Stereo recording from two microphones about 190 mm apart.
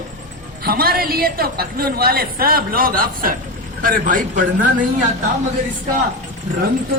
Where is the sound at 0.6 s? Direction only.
50° right (ahead or behind).